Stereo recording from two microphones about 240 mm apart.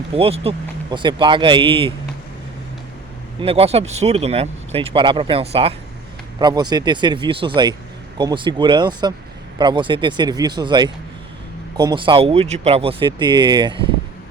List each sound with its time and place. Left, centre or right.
0.1 s speech: right
3.4 s speech: right